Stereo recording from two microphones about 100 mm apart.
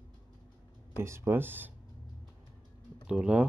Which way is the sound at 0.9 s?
25° right (ahead or behind).